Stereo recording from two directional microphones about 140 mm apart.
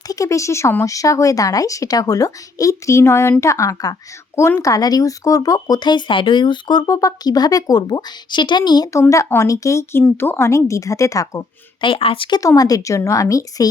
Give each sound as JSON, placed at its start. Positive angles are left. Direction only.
{"t": 0.1, "sound": "speech", "side_deg": 25}
{"t": 11.8, "sound": "speech", "side_deg": 40}
{"t": 12.4, "sound": "speech", "side_deg": 25}